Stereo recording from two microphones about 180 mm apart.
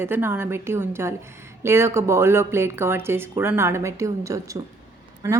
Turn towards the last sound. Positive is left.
turn(degrees=-15)  # may be behind; listen again after turning